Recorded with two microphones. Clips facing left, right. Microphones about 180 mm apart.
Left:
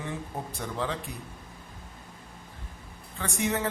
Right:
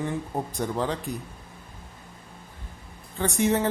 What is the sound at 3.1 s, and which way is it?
Speech, 35° right (ahead or behind).